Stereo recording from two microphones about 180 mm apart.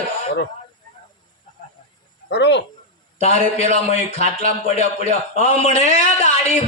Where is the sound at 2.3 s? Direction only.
75° left (ahead or behind).